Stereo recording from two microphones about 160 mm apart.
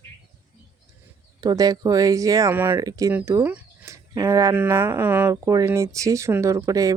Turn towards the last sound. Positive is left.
turn(degrees=-20)  # may be behind; listen again after turning